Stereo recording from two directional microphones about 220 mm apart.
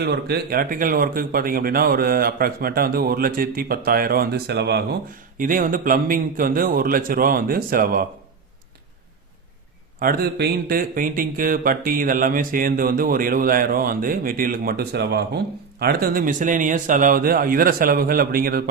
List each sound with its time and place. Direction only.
0.0 s speech: 45° right (ahead or behind)
10.0 s speech: 40° right (ahead or behind)